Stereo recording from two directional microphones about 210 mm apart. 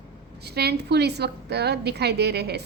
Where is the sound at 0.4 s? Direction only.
50° right (ahead or behind).